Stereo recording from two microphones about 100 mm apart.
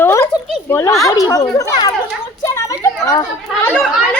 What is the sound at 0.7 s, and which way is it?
Speech, 30° left (ahead or behind).